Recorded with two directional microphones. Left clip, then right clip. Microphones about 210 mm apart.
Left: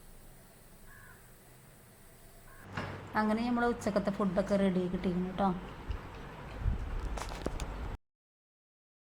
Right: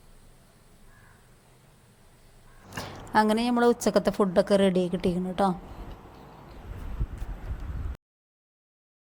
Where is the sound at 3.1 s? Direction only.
45° right (ahead or behind).